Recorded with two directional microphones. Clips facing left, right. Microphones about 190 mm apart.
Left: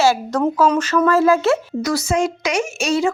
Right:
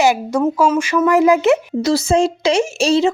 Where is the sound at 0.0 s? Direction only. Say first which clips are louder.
Right 2 dB; 15° right (ahead or behind).